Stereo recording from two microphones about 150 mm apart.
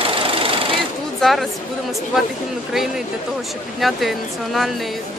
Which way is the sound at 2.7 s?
5° right (ahead or behind).